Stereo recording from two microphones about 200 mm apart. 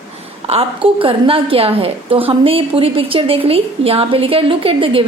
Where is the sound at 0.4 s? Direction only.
30° right (ahead or behind).